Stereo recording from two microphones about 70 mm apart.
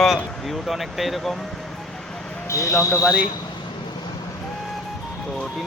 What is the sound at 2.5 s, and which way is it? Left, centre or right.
Speech, left.